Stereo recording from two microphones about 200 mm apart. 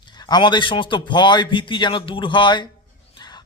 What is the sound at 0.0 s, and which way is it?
A man's voice, 20° left (ahead or behind).